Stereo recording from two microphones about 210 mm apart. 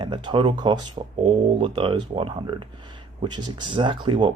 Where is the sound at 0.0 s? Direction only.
20° right (ahead or behind).